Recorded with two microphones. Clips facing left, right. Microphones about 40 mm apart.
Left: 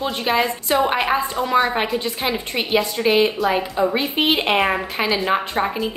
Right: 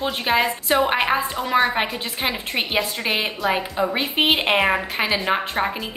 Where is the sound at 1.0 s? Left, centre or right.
Centre.